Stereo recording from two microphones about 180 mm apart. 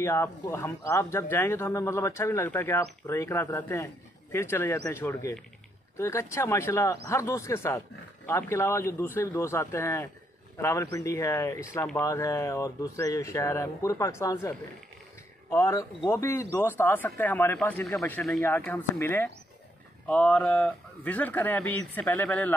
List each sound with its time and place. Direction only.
0.0 s speech: 15° left (ahead or behind)